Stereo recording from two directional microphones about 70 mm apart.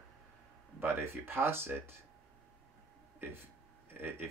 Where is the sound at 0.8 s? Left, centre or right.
Right.